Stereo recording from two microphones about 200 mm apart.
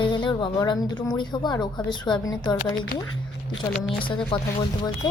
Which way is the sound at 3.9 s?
25° left (ahead or behind).